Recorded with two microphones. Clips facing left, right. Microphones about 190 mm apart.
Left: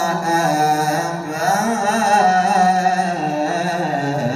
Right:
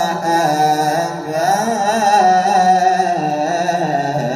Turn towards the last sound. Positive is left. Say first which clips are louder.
# right 2 dB
turn(degrees=-40)  # may be behind; listen again after turning